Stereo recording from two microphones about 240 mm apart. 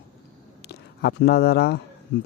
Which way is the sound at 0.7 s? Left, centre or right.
Left.